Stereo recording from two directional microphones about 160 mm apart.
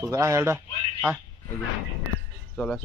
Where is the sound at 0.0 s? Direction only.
20° right (ahead or behind).